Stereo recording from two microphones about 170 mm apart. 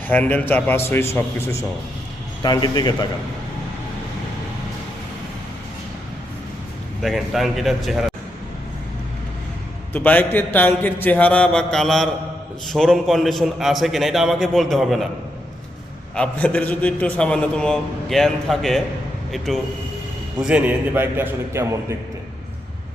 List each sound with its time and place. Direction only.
0.1 s a man's voice: 10° left (ahead or behind); by 3.1 s 25° left (ahead or behind)
7.0 s a man's voice: centre (ahead or behind)
9.9 s a man's voice: 10° left (ahead or behind)
16.1 s a man's voice: 5° left (ahead or behind); by 21.9 s 15° right (ahead or behind)